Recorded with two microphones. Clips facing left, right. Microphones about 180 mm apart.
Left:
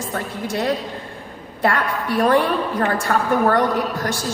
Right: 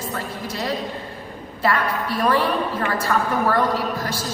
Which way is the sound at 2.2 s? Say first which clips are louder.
Left 3 dB; 50° left (ahead or behind).